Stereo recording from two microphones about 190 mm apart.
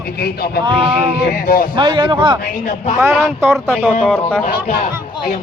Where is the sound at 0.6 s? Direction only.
30° right (ahead or behind).